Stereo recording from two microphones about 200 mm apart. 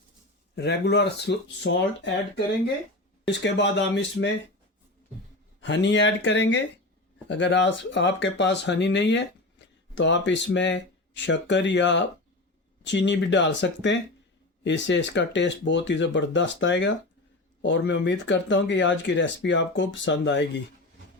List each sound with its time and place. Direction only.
0.5 s speech: 55° left (ahead or behind)
5.5 s speech: 60° left (ahead or behind)